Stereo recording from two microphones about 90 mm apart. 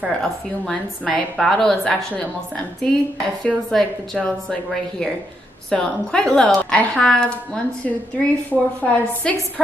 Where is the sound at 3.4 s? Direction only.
10° left (ahead or behind).